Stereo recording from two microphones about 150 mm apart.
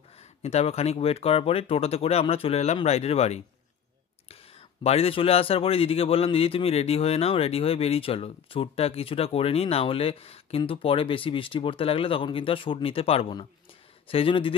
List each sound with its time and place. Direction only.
0.4 s speech: 45° left (ahead or behind)